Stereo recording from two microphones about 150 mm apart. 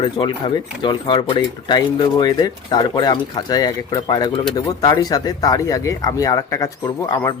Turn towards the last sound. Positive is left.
turn(degrees=25)  # may be behind; listen again after turning